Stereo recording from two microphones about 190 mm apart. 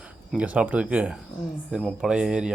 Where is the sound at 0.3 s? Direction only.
5° right (ahead or behind).